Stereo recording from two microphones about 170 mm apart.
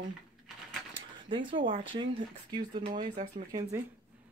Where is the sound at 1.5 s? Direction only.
30° right (ahead or behind).